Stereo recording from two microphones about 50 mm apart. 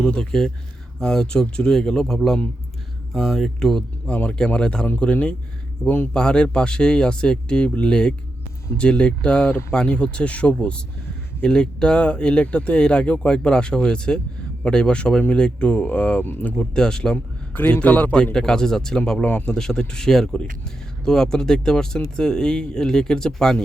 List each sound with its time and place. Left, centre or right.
0.0 s speech: centre
4.1 s a man's voice: left
16.6 s speech: centre
17.5 s a man's voice: left
18.1 s speech: centre